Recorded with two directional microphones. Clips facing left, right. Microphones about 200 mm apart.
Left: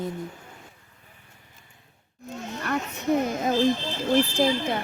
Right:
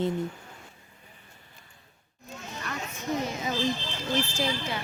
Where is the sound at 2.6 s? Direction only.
60° left (ahead or behind).